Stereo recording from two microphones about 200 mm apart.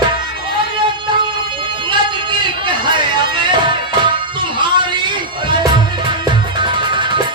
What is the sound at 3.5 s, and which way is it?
Music, 25° right (ahead or behind).